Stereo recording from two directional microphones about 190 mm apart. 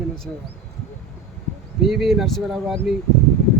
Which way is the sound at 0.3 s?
Centre (ahead or behind).